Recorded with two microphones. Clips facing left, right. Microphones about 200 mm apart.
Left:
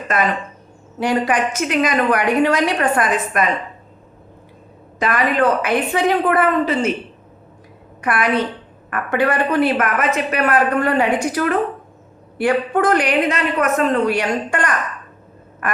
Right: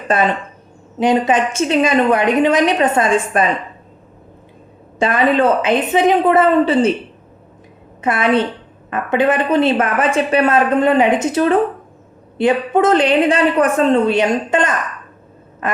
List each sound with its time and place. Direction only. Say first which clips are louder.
0.1 s a woman's voice: right 4 dB; 30° right (ahead or behind)
4.9 s a woman's voice: right 4 dB; 30° right (ahead or behind)
8.0 s a woman's voice: right 3 dB; 25° right (ahead or behind)
15.6 s quack: right 2 dB; 25° right (ahead or behind)